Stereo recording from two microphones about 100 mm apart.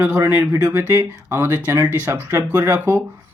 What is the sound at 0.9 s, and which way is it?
Speech, 30° right (ahead or behind).